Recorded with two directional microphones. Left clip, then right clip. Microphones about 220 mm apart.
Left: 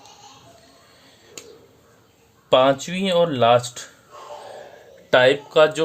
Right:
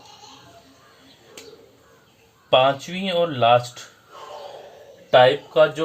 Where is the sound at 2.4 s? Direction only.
55° left (ahead or behind).